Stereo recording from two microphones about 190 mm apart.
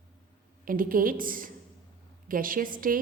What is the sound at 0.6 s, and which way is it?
A woman's voice, 45° right (ahead or behind).